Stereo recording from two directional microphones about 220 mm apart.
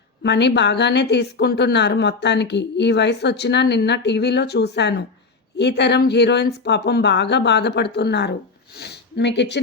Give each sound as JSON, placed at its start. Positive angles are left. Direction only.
{"t": 0.2, "sound": "a woman's voice", "side_deg": 50}